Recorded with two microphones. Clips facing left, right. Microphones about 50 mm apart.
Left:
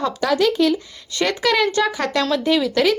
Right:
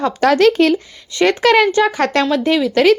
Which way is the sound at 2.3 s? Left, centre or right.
Right.